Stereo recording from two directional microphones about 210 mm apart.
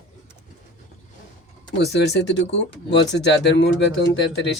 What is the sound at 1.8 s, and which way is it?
Speech, 50° left (ahead or behind).